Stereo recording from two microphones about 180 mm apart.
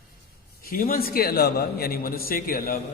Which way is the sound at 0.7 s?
55° left (ahead or behind).